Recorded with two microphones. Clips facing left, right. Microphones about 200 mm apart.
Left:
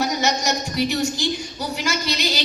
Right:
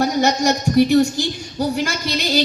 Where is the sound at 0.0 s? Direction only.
50° right (ahead or behind).